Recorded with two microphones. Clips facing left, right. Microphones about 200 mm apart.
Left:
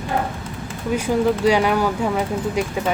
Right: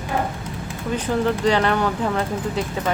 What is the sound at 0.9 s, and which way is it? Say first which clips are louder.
Speech: left 3 dB; 10° left (ahead or behind).